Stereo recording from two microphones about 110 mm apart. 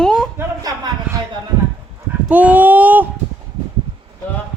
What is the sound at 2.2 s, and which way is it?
Speech, 15° right (ahead or behind).